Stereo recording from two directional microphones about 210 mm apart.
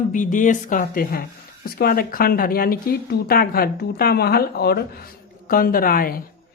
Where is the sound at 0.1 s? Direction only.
40° left (ahead or behind).